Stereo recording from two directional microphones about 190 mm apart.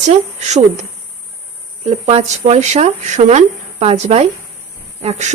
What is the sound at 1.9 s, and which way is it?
Speech, 30° right (ahead or behind).